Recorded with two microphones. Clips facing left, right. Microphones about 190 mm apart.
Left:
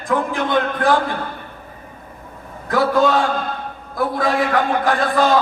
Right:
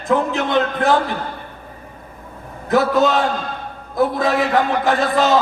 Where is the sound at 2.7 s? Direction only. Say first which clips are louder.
Right 1 dB; 20° right (ahead or behind).